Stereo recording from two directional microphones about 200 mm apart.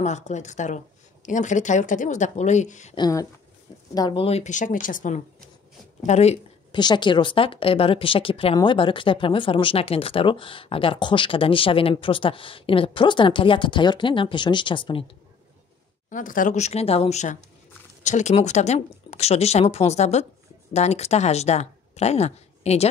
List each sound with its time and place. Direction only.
0.0 s speech: 35° left (ahead or behind)
3.0 s speech: 15° left (ahead or behind); by 6.8 s 35° left (ahead or behind)
6.8 s speech: 20° left (ahead or behind)
16.1 s speech: 40° left (ahead or behind)